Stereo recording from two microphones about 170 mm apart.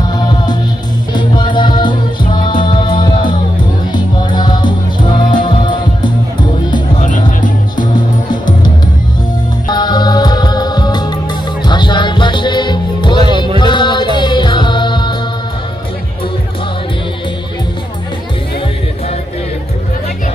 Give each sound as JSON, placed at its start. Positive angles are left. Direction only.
{"t": 0.2, "sound": "music", "side_deg": 25}
{"t": 7.0, "sound": "music", "side_deg": 50}
{"t": 7.7, "sound": "music", "side_deg": 25}
{"t": 9.7, "sound": "music", "side_deg": 25}